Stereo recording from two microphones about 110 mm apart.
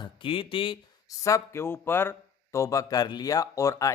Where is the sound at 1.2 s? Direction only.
25° left (ahead or behind).